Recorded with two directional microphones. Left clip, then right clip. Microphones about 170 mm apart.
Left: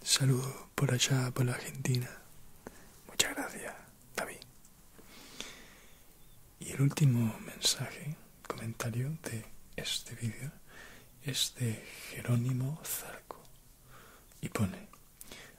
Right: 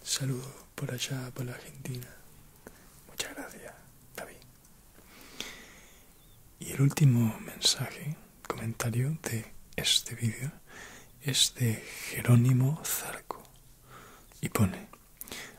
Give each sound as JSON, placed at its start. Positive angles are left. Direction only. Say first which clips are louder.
{"t": 0.0, "sound": "speech", "louder": "left 4 dB", "side_deg": 25}
{"t": 2.6, "sound": "whispering", "louder": "left 2 dB", "side_deg": 20}
{"t": 5.3, "sound": "a sound", "louder": "right 5 dB", "side_deg": -25}
{"t": 6.6, "sound": "speech", "louder": "right 4 dB", "side_deg": -25}
{"t": 13.9, "sound": "whispering", "louder": "right 5 dB", "side_deg": -45}